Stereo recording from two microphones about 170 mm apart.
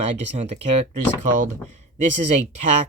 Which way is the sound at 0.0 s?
40° right (ahead or behind).